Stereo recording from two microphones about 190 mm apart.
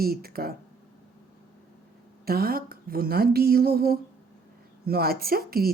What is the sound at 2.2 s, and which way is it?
A woman's voice, 55° right (ahead or behind).